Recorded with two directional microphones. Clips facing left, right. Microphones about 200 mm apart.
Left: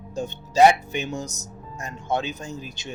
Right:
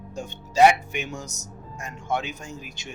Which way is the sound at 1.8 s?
35° left (ahead or behind).